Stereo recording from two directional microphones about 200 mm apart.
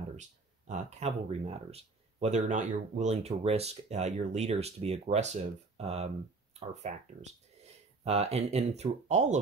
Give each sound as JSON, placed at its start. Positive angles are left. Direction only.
{"t": 0.1, "sound": "speech", "side_deg": -35}